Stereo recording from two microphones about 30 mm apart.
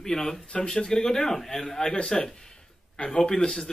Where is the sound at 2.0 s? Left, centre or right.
Left.